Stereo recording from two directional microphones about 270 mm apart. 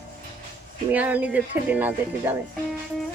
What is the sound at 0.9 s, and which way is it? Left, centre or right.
Speech, centre.